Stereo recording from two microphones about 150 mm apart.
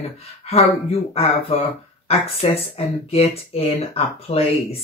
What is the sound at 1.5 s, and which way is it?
Speech, 40° left (ahead or behind).